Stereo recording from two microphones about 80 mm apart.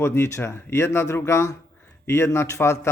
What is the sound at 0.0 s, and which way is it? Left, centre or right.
Speech, left.